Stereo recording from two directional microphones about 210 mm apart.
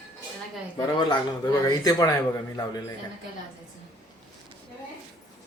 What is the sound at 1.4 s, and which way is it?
Speech, 20° left (ahead or behind).